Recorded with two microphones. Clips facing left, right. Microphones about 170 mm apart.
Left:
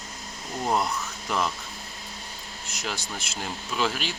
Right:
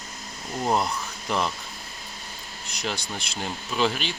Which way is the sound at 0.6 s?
Centre (ahead or behind).